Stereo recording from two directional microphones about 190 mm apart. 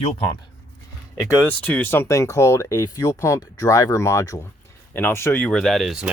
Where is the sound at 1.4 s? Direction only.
10° left (ahead or behind).